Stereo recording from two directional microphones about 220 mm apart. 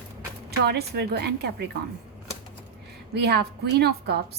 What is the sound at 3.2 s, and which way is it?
A woman's voice, 45° right (ahead or behind).